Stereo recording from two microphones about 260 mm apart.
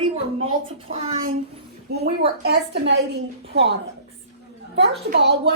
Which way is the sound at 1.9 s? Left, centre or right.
Right.